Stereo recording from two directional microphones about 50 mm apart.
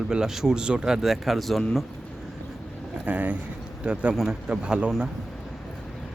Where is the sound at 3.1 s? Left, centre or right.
Right.